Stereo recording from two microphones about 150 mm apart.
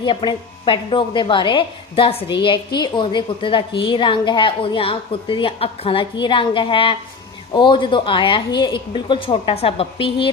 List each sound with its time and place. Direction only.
0.0 s a woman's voice: 30° left (ahead or behind)